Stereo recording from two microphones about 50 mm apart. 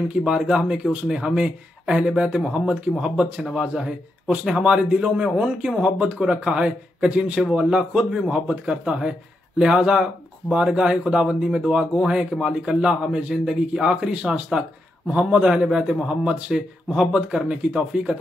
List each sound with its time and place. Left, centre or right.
0.1 s speech: centre